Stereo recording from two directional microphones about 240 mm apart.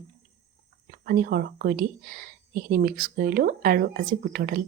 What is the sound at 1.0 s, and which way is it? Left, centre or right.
Speech, right.